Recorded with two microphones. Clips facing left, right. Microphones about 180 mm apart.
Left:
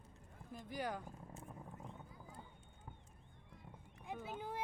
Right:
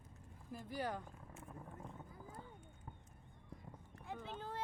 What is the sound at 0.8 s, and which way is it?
Speech, 10° left (ahead or behind).